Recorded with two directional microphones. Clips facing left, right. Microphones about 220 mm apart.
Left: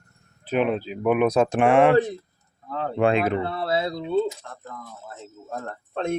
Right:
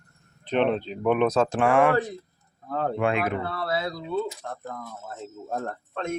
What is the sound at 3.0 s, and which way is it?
Speech, 30° left (ahead or behind).